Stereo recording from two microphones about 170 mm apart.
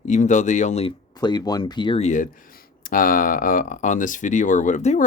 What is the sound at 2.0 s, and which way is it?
Speech, 45° left (ahead or behind).